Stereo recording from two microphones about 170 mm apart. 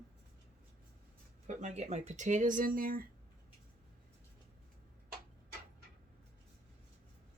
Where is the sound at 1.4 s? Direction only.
40° right (ahead or behind); by 3.1 s 55° right (ahead or behind).